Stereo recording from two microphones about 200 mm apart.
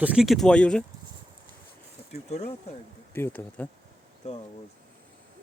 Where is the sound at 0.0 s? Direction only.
5° right (ahead or behind).